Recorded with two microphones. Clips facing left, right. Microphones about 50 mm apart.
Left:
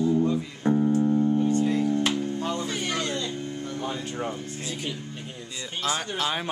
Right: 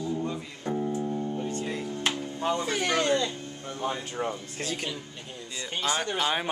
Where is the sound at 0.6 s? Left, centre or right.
Left.